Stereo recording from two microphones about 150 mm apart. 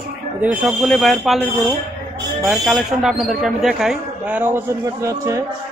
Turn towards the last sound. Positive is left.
turn(degrees=-20)  # may be behind; listen again after turning